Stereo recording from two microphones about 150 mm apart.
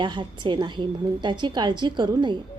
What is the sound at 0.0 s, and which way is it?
A woman's voice, 30° right (ahead or behind).